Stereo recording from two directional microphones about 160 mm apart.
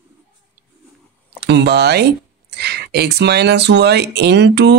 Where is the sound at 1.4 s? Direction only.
90° right.